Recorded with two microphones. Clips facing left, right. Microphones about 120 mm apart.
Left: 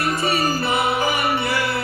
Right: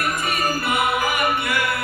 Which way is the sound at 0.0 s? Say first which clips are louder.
Left 3 dB; 30° left (ahead or behind).